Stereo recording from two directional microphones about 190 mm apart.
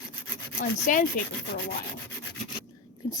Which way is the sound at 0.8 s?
45° left (ahead or behind).